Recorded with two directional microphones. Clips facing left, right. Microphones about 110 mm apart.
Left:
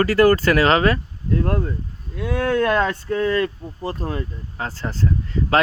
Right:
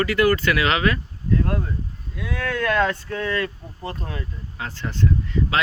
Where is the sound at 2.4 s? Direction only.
35° left (ahead or behind).